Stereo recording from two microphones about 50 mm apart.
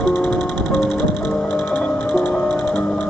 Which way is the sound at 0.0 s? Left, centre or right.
Left.